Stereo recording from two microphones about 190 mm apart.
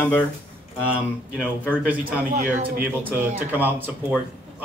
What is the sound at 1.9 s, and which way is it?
Speech, 10° right (ahead or behind).